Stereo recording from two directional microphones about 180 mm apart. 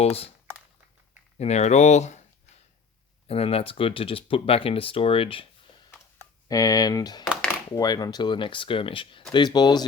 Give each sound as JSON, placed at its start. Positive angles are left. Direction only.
{"t": 0.0, "sound": "speech", "side_deg": 35}
{"t": 1.4, "sound": "speech", "side_deg": 40}
{"t": 3.2, "sound": "speech", "side_deg": 35}
{"t": 6.5, "sound": "speech", "side_deg": 20}